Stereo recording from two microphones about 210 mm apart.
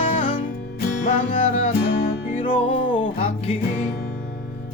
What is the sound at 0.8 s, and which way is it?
Music, 45° left (ahead or behind).